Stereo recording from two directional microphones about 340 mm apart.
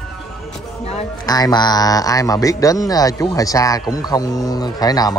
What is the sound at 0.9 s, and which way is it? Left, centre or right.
A man's voice, centre.